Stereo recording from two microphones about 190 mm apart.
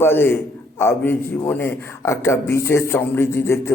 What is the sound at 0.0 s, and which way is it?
A man's voice, 10° left (ahead or behind).